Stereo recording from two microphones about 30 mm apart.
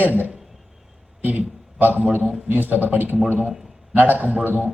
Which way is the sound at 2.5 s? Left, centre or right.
Right.